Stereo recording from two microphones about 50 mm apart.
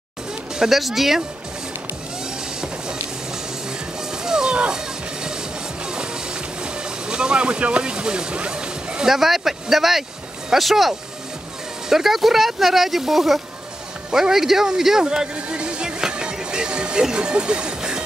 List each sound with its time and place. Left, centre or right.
0.6 s speech: centre
4.1 s music: centre
9.1 s speech: centre